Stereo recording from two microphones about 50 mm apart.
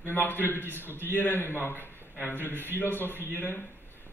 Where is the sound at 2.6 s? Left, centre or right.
Left.